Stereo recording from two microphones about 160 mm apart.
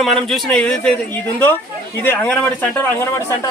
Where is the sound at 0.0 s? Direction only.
Centre (ahead or behind).